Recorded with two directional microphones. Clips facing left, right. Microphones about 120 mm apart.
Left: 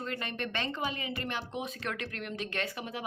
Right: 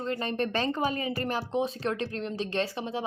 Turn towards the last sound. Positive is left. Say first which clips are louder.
# right 6 dB
turn(degrees=-30)  # may be behind; listen again after turning